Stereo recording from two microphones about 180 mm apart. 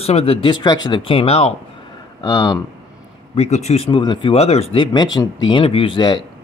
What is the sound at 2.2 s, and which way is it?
Speech, 20° left (ahead or behind).